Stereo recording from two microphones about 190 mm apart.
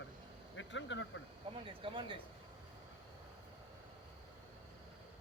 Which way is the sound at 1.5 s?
30° right (ahead or behind).